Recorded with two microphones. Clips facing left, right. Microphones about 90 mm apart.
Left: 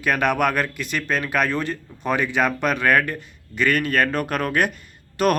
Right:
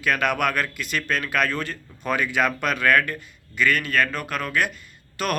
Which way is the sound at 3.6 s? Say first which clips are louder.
Left 2 dB; 40° left (ahead or behind).